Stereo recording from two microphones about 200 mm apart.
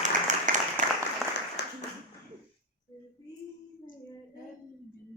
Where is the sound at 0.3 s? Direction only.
40° right (ahead or behind).